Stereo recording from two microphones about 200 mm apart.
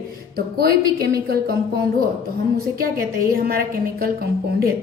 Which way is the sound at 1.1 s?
50° right (ahead or behind).